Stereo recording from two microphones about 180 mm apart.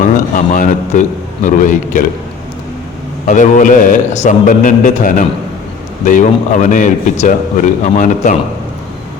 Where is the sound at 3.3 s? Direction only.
45° left (ahead or behind).